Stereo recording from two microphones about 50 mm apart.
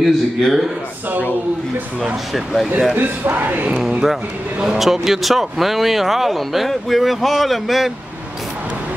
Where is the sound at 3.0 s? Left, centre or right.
Right.